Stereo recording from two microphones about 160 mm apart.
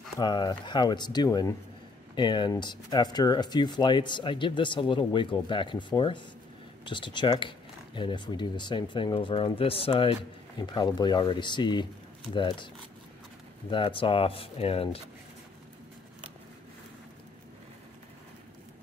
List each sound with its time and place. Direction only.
0.2 s speech: 25° left (ahead or behind)
13.7 s speech: 30° left (ahead or behind)